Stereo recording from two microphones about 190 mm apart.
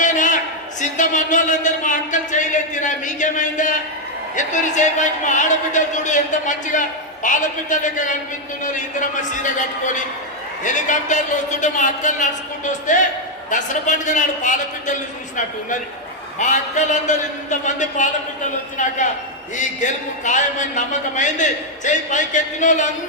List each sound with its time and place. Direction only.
0.0 s a sound: 40° left (ahead or behind)
0.8 s a man's voice: 40° left (ahead or behind)
16.4 s a man's voice: 40° left (ahead or behind)